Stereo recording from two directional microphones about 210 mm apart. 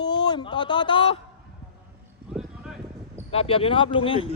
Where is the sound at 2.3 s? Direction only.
Centre (ahead or behind).